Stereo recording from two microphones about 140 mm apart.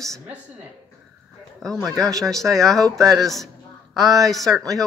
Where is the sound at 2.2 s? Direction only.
Centre (ahead or behind).